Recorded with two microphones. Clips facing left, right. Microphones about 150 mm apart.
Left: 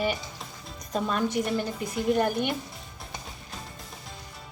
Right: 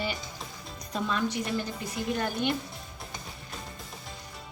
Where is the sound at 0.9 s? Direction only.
45° left (ahead or behind).